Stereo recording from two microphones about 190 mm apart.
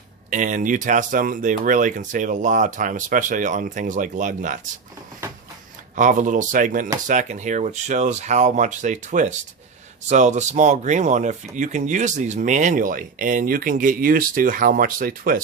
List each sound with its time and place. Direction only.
0.3 s speech: 40° right (ahead or behind)
6.0 s speech: 40° right (ahead or behind)